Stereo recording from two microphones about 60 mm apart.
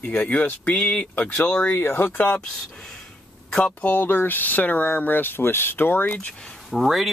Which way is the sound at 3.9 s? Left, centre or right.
Left.